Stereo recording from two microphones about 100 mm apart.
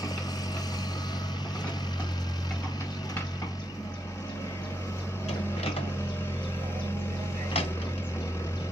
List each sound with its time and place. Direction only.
7.5 s vehicle: 70° left (ahead or behind)